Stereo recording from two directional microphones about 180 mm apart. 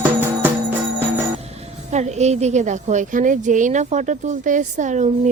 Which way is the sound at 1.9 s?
40° right (ahead or behind).